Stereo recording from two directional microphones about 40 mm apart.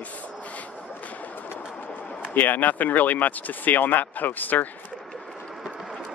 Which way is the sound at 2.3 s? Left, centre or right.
Left.